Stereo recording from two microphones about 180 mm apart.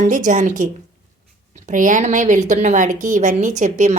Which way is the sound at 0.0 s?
45° right (ahead or behind).